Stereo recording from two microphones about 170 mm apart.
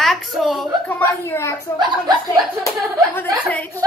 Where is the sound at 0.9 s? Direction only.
15° left (ahead or behind).